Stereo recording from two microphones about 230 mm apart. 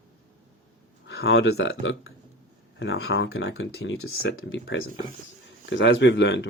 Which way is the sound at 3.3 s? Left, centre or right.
Left.